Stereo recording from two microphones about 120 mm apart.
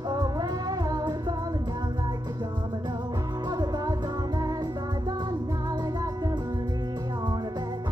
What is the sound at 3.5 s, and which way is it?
Music, 35° right (ahead or behind).